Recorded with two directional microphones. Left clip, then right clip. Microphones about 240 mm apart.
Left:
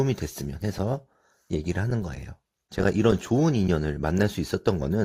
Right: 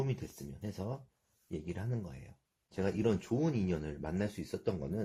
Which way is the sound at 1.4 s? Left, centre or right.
Left.